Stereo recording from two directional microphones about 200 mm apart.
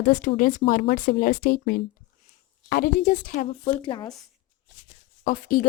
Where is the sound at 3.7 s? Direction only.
25° left (ahead or behind).